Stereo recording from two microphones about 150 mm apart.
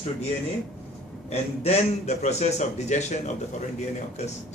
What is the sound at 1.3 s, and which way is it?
Speech, 45° left (ahead or behind).